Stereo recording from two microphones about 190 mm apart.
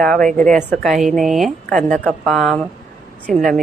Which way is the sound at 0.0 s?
5° left (ahead or behind).